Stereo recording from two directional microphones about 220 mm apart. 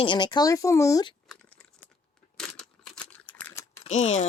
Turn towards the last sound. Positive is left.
turn(degrees=30)  # may be behind; listen again after turning